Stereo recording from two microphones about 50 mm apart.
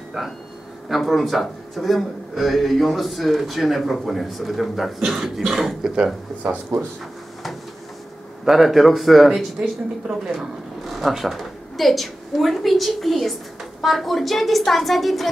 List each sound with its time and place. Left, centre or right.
0.8 s a man's voice: centre
8.5 s a man's voice: centre
9.6 s speech: right
10.8 s a woman's voice: centre